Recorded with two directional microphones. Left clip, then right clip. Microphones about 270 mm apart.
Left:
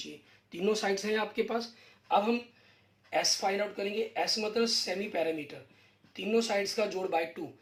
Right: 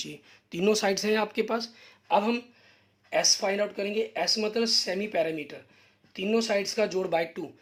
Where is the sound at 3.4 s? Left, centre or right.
Right.